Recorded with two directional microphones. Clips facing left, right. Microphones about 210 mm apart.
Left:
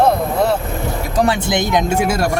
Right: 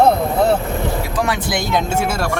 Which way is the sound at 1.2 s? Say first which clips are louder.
Left 4 dB; 25° left (ahead or behind).